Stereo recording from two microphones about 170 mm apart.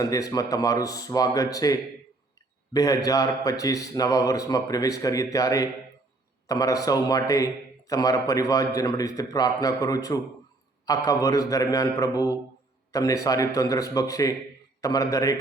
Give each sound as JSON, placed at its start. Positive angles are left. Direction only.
{"t": 0.0, "sound": "a man's voice", "side_deg": 20}